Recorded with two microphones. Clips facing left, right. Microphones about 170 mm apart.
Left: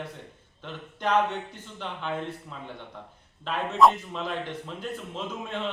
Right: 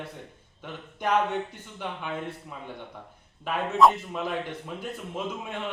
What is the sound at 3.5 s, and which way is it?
A man's voice, 5° right (ahead or behind).